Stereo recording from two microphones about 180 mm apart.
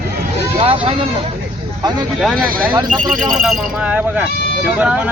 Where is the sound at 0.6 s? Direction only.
30° right (ahead or behind).